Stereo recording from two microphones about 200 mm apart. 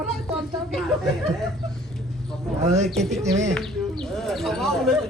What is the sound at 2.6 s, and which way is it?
Speech, 35° right (ahead or behind).